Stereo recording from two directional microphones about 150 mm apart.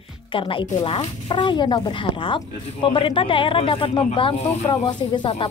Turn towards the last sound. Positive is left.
turn(degrees=35)  # may be behind; listen again after turning